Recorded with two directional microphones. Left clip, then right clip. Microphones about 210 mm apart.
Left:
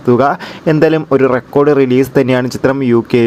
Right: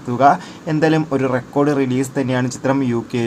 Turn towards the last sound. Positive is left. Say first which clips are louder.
# left 8 dB
turn(degrees=30)  # may be behind; listen again after turning